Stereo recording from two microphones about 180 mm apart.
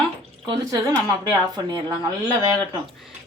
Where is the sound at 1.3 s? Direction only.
25° right (ahead or behind).